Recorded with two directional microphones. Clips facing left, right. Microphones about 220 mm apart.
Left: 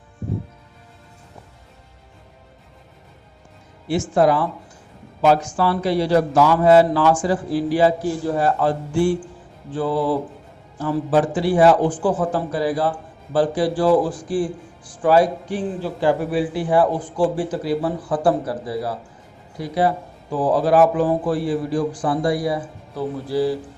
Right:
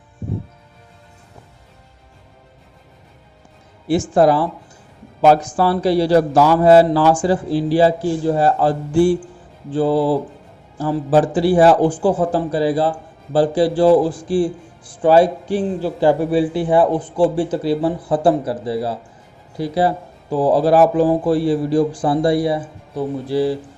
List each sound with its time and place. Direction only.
4.1 s a man's voice: 35° right (ahead or behind)